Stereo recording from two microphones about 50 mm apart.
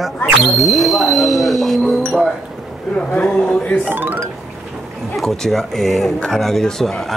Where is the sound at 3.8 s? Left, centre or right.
Right.